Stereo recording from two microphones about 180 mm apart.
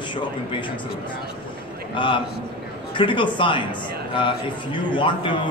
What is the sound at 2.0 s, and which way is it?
A man's voice, 25° left (ahead or behind).